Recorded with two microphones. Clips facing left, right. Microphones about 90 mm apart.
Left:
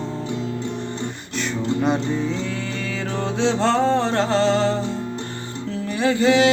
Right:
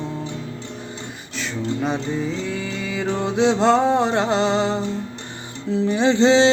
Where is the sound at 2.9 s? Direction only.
15° right (ahead or behind).